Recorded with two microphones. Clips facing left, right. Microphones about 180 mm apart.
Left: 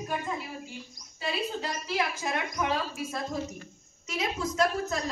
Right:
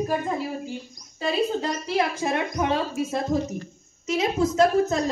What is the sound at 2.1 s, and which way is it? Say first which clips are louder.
A woman's voice: right 6 dB; 30° right (ahead or behind).